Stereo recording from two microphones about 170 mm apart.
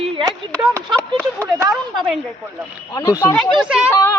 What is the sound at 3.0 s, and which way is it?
Speech, 20° left (ahead or behind).